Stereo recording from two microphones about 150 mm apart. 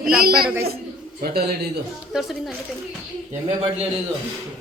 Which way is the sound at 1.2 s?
90° right.